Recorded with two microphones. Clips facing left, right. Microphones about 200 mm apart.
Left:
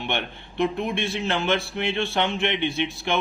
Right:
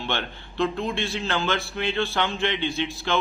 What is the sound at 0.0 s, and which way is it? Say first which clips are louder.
A man's voice: left 1 dB; 20° left (ahead or behind).